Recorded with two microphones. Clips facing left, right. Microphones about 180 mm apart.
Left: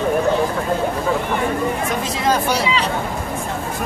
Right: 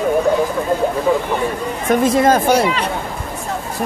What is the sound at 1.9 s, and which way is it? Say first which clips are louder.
Speech: right 7 dB; 50° right (ahead or behind).